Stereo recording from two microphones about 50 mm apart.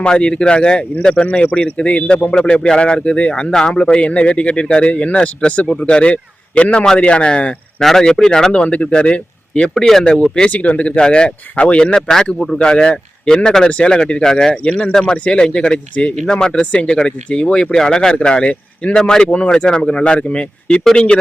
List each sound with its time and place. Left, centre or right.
0.0 s a man's voice: centre
7.8 s a man's voice: centre; by 11.9 s left
11.9 s speech: centre
12.5 s speech: left
13.7 s a man's voice: left
14.5 s a man's voice: left